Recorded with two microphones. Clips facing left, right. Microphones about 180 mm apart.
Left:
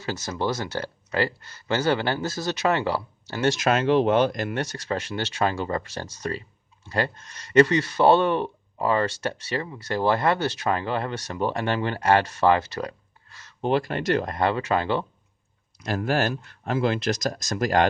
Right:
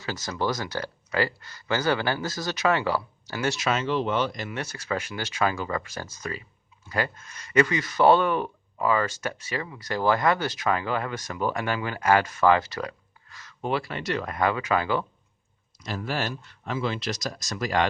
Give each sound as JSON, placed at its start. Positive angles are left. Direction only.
{"t": 0.0, "sound": "speech", "side_deg": 20}
{"t": 3.6, "sound": "speech", "side_deg": 50}
{"t": 4.5, "sound": "speech", "side_deg": 30}
{"t": 7.6, "sound": "speech", "side_deg": 30}
{"t": 13.6, "sound": "speech", "side_deg": 35}
{"t": 15.8, "sound": "speech", "side_deg": 55}